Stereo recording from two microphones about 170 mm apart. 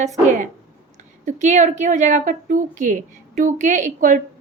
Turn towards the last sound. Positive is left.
turn(degrees=-50)  # may be behind; listen again after turning